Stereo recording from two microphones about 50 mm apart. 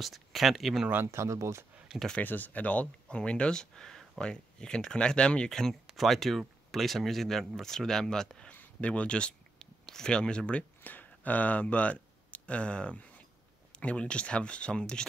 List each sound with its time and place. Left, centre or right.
0.0 s speech: centre
1.0 s speech: right
2.2 s speech: left
5.5 s speech: centre
8.5 s a sound: left
9.6 s speech: centre
10.8 s speech: left; by 15.0 s centre